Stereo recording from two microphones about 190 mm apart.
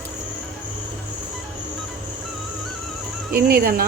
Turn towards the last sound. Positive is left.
turn(degrees=-50)  # may be behind; listen again after turning